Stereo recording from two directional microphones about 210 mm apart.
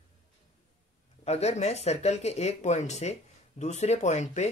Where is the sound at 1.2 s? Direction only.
30° left (ahead or behind).